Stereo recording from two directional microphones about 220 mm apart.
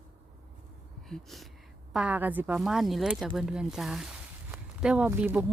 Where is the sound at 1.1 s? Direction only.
Centre (ahead or behind).